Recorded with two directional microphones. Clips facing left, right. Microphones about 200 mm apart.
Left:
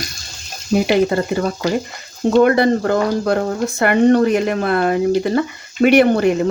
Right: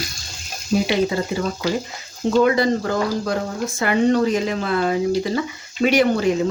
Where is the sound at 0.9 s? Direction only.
55° left (ahead or behind).